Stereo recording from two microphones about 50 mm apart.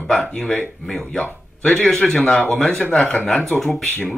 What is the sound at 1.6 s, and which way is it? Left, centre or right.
A man's voice, centre.